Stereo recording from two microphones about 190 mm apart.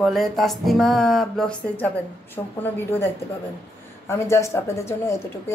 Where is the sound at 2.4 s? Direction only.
15° left (ahead or behind).